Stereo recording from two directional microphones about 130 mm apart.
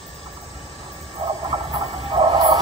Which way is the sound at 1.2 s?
45° right (ahead or behind).